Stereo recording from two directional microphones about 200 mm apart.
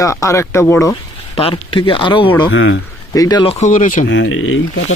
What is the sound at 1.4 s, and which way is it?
Speech, 25° left (ahead or behind).